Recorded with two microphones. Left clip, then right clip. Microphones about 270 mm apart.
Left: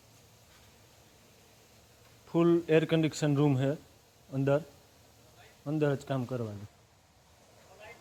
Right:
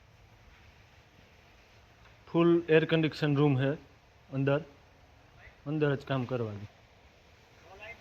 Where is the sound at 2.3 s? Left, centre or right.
Centre.